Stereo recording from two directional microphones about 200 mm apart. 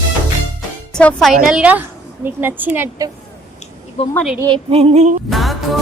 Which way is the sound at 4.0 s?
30° left (ahead or behind).